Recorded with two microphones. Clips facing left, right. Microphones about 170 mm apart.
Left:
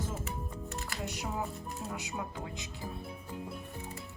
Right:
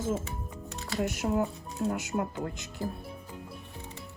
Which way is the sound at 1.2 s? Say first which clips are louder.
Right 9 dB; 65° right (ahead or behind).